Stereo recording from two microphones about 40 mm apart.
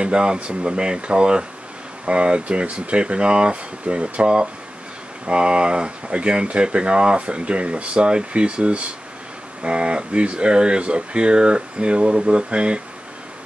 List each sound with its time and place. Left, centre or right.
0.0 s speech: right